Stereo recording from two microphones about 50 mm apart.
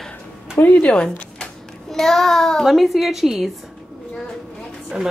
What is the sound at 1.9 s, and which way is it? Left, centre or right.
Speech, centre.